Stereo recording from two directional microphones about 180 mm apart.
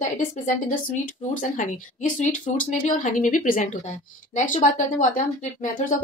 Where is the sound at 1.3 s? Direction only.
45° left (ahead or behind).